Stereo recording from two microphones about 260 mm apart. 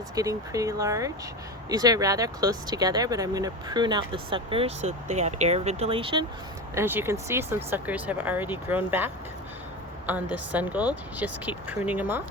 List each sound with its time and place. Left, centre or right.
0.2 s speech: centre
6.7 s speech: centre
10.3 s speech: centre